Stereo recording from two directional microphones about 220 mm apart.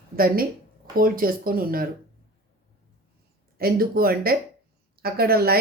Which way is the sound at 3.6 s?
40° right (ahead or behind).